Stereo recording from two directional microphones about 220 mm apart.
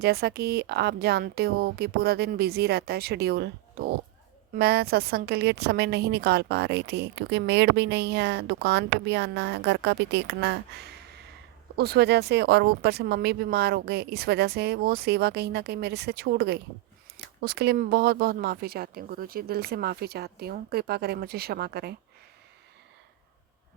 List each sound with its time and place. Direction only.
0.0 s a woman's voice: 45° right (ahead or behind)